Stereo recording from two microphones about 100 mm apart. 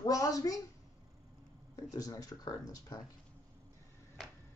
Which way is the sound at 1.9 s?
35° left (ahead or behind).